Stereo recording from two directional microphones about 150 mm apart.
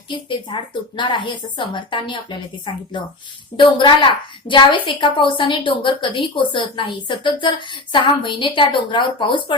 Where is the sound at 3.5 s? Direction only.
30° left (ahead or behind).